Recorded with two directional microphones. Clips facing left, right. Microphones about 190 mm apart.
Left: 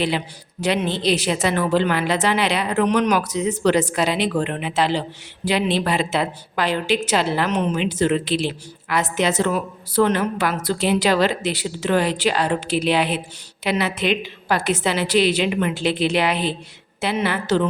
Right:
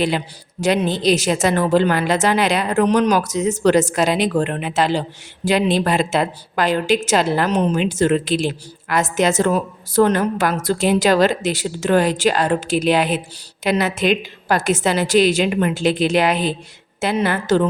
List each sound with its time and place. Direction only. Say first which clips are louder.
0.6 s a woman's voice: right 3 dB; 45° right (ahead or behind)